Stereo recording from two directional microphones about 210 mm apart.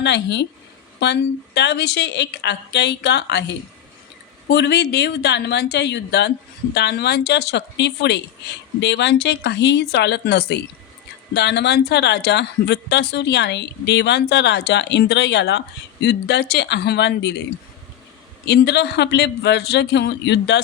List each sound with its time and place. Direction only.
0.0 s speech: 55° left (ahead or behind)
4.4 s speech: 50° left (ahead or behind)
18.4 s speech: 50° left (ahead or behind)